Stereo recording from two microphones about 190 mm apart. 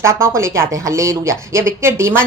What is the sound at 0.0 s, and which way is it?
A woman's voice, 15° right (ahead or behind).